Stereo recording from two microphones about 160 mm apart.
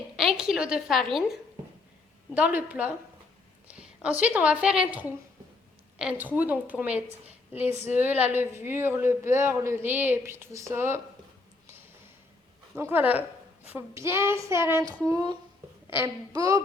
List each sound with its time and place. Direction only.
0.3 s a woman's voice: 5° right (ahead or behind)
12.7 s speech: 15° right (ahead or behind)